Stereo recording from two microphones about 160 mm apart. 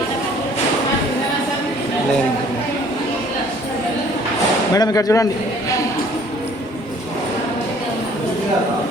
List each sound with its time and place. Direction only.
4.7 s speech: 20° left (ahead or behind)